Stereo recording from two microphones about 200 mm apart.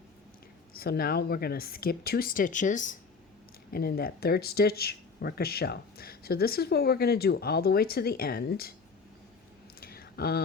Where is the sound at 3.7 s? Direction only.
50° left (ahead or behind).